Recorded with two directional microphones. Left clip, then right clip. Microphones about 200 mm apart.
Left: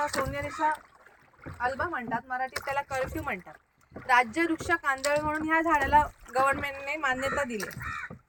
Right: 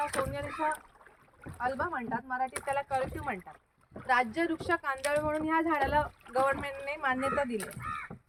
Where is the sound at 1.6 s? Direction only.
45° left (ahead or behind).